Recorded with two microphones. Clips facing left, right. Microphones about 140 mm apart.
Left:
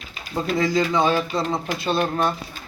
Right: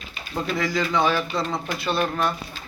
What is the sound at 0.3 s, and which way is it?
Speech, 20° left (ahead or behind).